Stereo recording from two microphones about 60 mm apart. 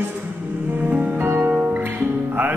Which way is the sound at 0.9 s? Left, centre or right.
Right.